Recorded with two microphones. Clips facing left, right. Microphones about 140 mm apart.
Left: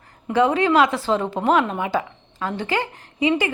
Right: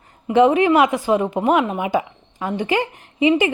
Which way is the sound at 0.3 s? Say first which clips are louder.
Right 3 dB; 20° right (ahead or behind).